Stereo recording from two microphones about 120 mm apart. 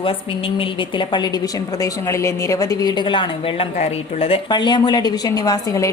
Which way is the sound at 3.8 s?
55° left (ahead or behind).